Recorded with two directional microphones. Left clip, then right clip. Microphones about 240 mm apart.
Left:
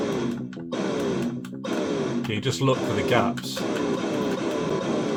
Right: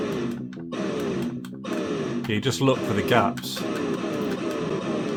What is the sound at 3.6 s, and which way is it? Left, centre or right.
Music, left.